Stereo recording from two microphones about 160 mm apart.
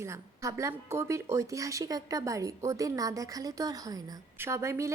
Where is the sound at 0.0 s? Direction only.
15° right (ahead or behind).